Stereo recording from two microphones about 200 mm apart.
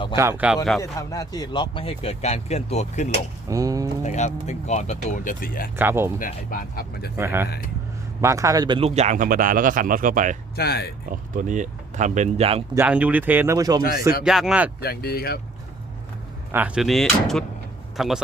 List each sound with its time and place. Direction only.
0.2 s speech: 10° right (ahead or behind)
0.8 s speech: 15° left (ahead or behind); by 3.1 s 35° left (ahead or behind)
3.5 s speech: 15° right (ahead or behind)
4.0 s speech: 35° left (ahead or behind)
5.7 s speech: 10° right (ahead or behind)
6.1 s speech: 45° left (ahead or behind)
7.2 s speech: 10° right (ahead or behind); by 10.3 s 40° right (ahead or behind)
10.5 s speech: 50° left (ahead or behind)
11.1 s speech: 40° right (ahead or behind)
12.7 s speech: 10° right (ahead or behind)
14.3 s speech: centre (ahead or behind)
14.8 s speech: 50° left (ahead or behind)
16.5 s speech: 10° right (ahead or behind)